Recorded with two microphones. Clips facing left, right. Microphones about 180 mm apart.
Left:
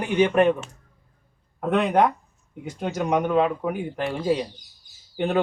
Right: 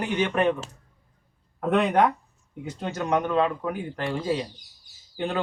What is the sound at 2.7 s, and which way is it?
Speech, 15° left (ahead or behind).